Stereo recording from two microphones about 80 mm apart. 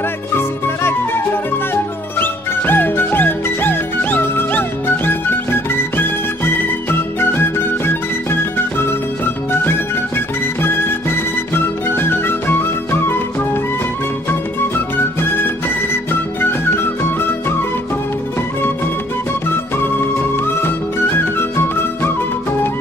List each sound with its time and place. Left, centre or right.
0.3 s music: left
15.0 s music: left
19.8 s music: left